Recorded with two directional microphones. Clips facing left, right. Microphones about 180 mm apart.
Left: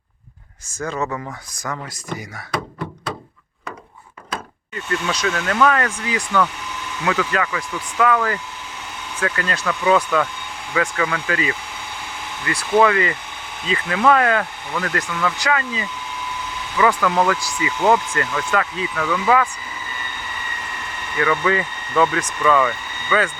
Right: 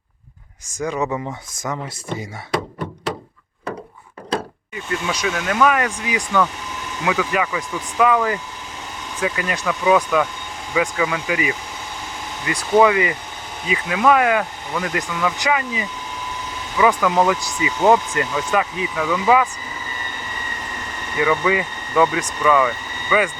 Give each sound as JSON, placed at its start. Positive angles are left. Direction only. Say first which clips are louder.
{"t": 0.7, "sound": "speech", "louder": "right 2 dB", "side_deg": -15}
{"t": 4.7, "sound": "speech", "louder": "left 1 dB", "side_deg": -10}
{"t": 21.2, "sound": "speech", "louder": "right 1 dB", "side_deg": -10}